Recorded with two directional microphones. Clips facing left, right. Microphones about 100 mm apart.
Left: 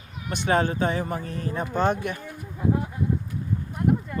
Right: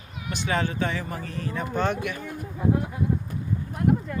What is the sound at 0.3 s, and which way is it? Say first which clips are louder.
Speech: left 4 dB; 45° left (ahead or behind).